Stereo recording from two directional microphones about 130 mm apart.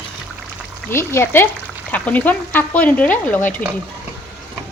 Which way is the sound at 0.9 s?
20° left (ahead or behind).